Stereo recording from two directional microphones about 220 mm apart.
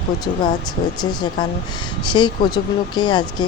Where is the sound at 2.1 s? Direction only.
20° left (ahead or behind).